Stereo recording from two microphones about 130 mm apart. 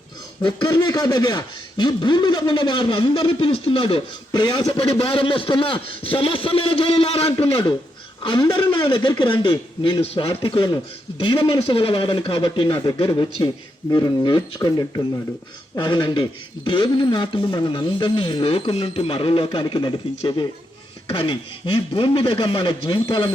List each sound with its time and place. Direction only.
0.7 s speech: 30° left (ahead or behind); by 7.5 s 50° left (ahead or behind)
8.2 s speech: 35° left (ahead or behind)